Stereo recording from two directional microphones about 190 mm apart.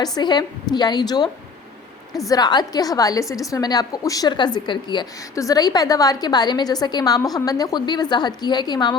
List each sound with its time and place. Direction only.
0.0 s a woman's voice: 20° left (ahead or behind)
2.3 s a woman's voice: 20° left (ahead or behind)